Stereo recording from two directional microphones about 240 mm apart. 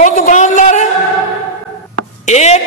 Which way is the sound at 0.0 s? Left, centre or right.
Left.